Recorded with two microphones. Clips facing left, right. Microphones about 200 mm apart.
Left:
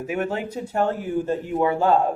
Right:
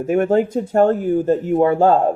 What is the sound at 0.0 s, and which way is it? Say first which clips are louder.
Speech: right 10 dB; 50° right (ahead or behind).